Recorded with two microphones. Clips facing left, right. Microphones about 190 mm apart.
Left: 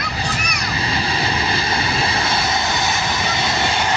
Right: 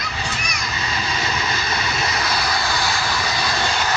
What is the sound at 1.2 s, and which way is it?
Vehicle, 30° left (ahead or behind).